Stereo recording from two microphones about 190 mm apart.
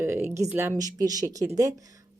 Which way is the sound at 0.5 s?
15° right (ahead or behind).